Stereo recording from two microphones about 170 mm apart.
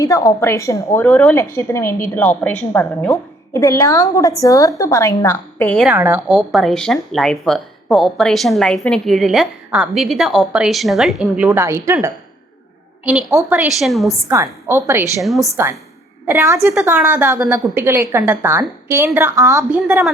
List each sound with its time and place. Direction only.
0.0 s a woman's voice: 20° left (ahead or behind)
3.5 s a woman's voice: 20° left (ahead or behind)
5.8 s speech: 10° right (ahead or behind)
13.3 s speech: 10° right (ahead or behind)
14.3 s a woman's voice: 15° right (ahead or behind)
15.2 s speech: centre (ahead or behind)
16.2 s a woman's voice: 15° right (ahead or behind)